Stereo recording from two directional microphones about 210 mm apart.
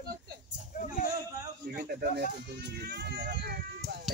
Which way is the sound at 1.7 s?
40° right (ahead or behind).